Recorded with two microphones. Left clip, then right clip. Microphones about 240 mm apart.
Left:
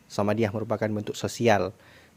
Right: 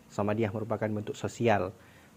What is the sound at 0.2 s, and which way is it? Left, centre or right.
Speech, left.